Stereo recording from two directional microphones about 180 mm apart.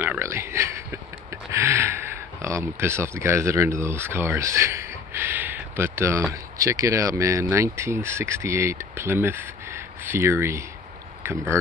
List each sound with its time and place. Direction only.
0.0 s speech: 15° right (ahead or behind)